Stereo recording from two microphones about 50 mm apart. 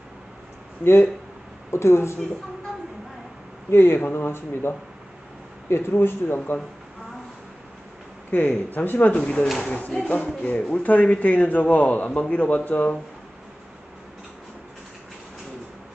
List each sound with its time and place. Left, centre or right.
1.7 s speech: left
3.7 s speech: left
8.3 s speech: left
9.1 s a man's voice: left